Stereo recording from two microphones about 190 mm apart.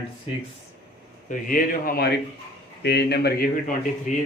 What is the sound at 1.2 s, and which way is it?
A man's voice, 45° left (ahead or behind).